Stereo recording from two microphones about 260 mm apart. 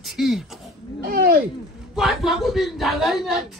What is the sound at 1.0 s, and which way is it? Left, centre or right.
Speech, right.